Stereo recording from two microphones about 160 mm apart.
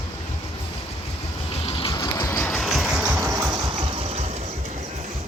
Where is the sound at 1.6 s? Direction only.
35° left (ahead or behind).